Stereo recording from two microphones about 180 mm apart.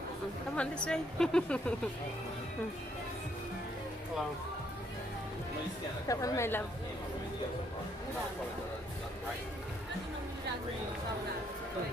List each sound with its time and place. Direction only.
0.5 s a woman's voice: 5° left (ahead or behind)
6.1 s a woman's voice: 15° left (ahead or behind)